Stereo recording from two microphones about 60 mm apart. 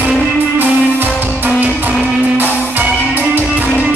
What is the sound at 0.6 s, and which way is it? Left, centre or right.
Music, right.